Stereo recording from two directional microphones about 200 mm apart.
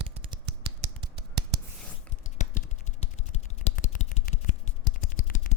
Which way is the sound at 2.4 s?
35° left (ahead or behind).